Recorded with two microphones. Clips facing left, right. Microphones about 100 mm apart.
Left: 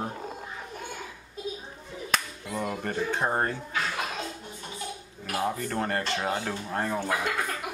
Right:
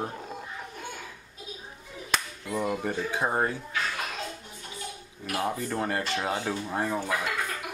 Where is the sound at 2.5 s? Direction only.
5° right (ahead or behind).